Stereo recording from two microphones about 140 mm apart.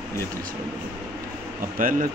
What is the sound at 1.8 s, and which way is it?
Speech, 75° right (ahead or behind).